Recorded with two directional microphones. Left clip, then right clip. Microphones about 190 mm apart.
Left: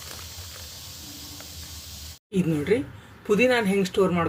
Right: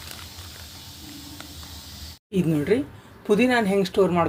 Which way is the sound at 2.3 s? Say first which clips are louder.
Right 1 dB; centre (ahead or behind).